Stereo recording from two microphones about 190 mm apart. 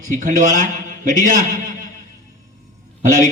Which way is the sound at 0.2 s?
45° right (ahead or behind).